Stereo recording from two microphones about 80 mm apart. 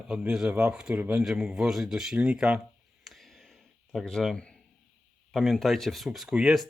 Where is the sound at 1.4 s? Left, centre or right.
Centre.